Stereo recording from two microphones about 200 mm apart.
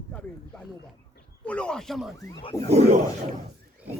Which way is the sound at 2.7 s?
35° right (ahead or behind).